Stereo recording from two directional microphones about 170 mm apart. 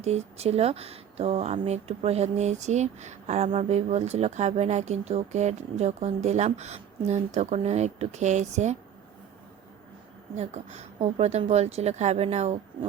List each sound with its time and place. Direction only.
0.0 s speech: 40° right (ahead or behind)
10.3 s speech: 45° right (ahead or behind)